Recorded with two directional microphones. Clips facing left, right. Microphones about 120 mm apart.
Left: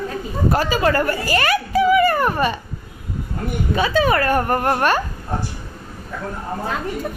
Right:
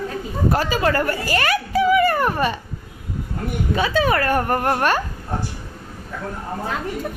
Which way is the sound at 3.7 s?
5° left (ahead or behind).